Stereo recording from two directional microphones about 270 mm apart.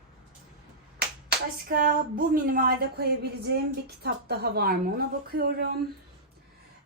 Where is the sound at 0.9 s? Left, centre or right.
Right.